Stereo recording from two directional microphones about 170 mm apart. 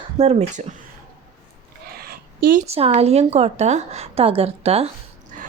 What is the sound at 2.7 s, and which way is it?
A woman's voice, 35° right (ahead or behind).